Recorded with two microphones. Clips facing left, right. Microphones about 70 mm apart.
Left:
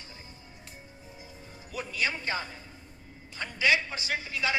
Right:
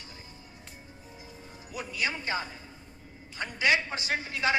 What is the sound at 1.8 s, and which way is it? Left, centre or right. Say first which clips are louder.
A man's voice: left 1 dB; right.